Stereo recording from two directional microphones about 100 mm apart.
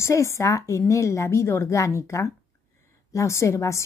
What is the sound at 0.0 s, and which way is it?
A woman's voice, 30° left (ahead or behind).